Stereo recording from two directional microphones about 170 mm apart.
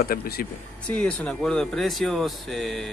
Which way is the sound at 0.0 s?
65° left (ahead or behind).